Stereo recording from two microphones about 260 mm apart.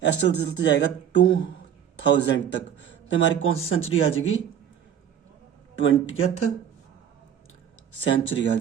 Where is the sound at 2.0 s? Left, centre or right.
Left.